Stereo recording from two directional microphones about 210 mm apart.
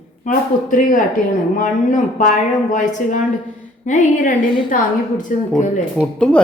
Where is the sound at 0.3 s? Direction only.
40° left (ahead or behind).